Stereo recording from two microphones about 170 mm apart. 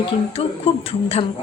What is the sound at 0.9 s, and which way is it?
Speech, 35° left (ahead or behind).